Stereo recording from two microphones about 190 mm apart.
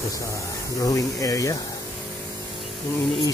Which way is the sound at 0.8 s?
15° left (ahead or behind).